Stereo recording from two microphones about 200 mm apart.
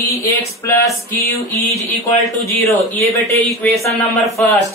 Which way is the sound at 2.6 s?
10° left (ahead or behind).